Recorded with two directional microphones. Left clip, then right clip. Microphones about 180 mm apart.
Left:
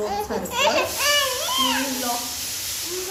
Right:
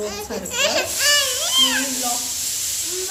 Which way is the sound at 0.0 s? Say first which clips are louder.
Left 2 dB; 15° left (ahead or behind).